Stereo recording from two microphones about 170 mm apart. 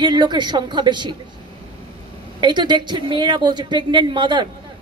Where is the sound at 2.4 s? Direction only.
25° right (ahead or behind).